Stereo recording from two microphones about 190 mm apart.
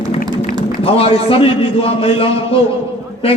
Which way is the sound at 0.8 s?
30° left (ahead or behind).